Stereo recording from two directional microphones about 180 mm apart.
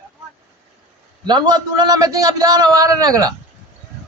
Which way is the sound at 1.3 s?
25° right (ahead or behind).